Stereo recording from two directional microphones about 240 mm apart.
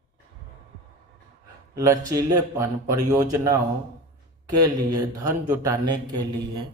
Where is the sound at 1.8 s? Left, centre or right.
Centre.